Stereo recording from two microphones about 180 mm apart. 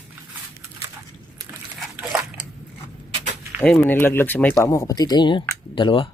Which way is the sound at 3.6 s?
10° left (ahead or behind).